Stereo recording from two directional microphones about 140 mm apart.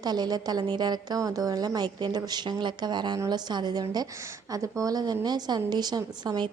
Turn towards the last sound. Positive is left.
turn(degrees=-30)  # may be behind; listen again after turning